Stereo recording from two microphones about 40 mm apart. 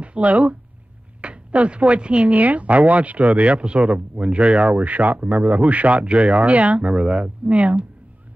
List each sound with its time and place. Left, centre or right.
0.0 s speech: right
4.7 s speech: right